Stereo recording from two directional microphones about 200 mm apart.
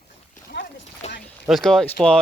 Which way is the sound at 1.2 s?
Centre (ahead or behind).